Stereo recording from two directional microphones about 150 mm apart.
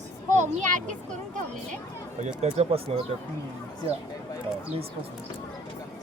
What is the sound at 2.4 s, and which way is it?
Speech, 45° right (ahead or behind).